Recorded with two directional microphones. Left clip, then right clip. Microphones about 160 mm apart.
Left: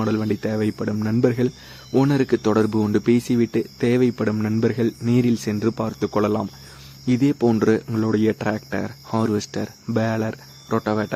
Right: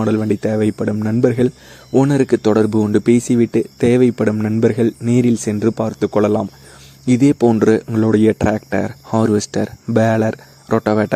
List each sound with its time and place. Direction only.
0.0 s speech: 25° right (ahead or behind)